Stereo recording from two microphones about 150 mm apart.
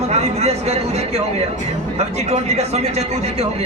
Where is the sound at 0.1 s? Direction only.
45° right (ahead or behind).